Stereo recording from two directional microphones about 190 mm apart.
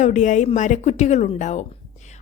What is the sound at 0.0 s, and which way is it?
A woman's voice, 40° left (ahead or behind).